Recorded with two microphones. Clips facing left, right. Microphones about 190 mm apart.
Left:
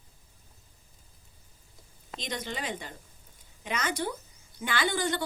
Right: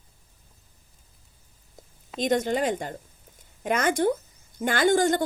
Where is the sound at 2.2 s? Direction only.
50° right (ahead or behind).